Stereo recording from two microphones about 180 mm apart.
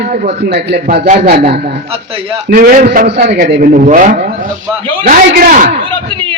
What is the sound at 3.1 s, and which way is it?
Speech, 65° right (ahead or behind).